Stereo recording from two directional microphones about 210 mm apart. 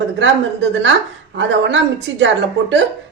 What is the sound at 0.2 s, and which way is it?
Speech, 60° right (ahead or behind).